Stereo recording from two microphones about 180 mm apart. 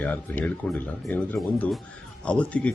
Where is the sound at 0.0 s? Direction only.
10° left (ahead or behind).